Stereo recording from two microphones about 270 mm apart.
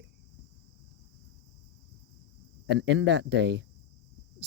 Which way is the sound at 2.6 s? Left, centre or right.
Right.